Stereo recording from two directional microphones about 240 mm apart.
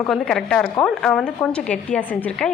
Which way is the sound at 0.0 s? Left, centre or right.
Centre.